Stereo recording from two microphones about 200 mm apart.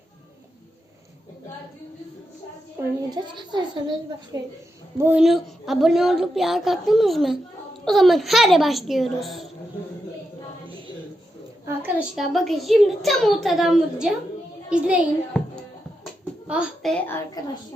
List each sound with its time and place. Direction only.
3.1 s a child's voice: 20° right (ahead or behind); by 9.5 s centre (ahead or behind)
11.6 s a sound: 10° right (ahead or behind)
12.1 s a woman's voice: centre (ahead or behind)
16.5 s a woman's voice: 5° right (ahead or behind); by 17.6 s 15° left (ahead or behind)